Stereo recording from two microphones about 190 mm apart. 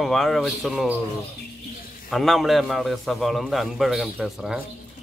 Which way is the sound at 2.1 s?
Centre (ahead or behind).